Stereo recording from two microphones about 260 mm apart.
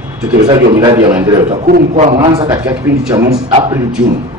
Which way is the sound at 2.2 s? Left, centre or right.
Centre.